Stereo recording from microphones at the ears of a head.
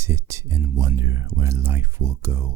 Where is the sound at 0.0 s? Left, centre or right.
Right.